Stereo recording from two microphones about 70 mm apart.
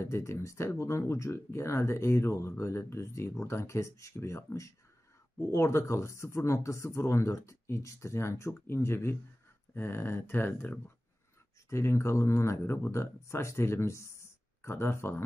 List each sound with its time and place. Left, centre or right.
0.0 s speech: left
11.7 s speech: left